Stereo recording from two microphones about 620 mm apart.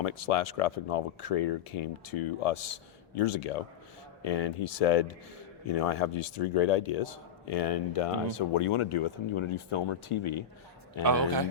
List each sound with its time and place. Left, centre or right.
0.0 s speech: left
11.0 s speech: right